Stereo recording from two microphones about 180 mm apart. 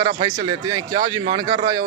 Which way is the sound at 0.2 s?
25° right (ahead or behind).